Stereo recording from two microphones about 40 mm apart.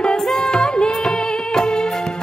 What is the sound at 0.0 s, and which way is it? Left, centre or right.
Music, centre.